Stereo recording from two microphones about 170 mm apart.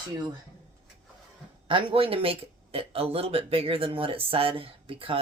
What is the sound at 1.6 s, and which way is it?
Speech, 30° right (ahead or behind).